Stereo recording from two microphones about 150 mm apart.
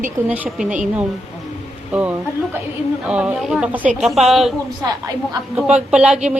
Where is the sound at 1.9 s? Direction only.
10° right (ahead or behind).